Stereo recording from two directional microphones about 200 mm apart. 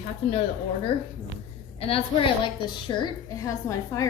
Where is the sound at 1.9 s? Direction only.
30° left (ahead or behind).